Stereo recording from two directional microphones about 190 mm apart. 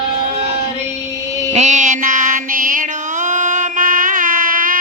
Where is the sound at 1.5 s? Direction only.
40° right (ahead or behind).